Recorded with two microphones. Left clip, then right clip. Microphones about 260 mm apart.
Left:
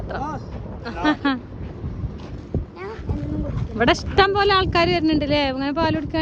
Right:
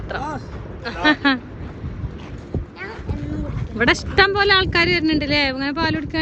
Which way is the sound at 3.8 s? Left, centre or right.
Centre.